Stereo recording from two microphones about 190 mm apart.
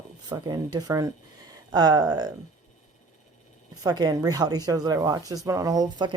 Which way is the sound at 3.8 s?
20° right (ahead or behind).